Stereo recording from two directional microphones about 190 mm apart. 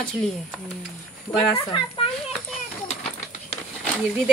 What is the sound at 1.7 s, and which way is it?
Speech, 25° left (ahead or behind).